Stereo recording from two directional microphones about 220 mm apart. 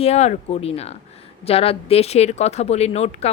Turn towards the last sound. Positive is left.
turn(degrees=30)  # may be behind; listen again after turning